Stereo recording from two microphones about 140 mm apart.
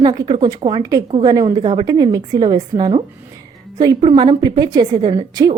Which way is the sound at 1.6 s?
35° right (ahead or behind).